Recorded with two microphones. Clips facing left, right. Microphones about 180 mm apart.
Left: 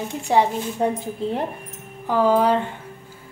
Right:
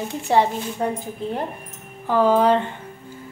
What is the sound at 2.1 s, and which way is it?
Speech, 10° left (ahead or behind).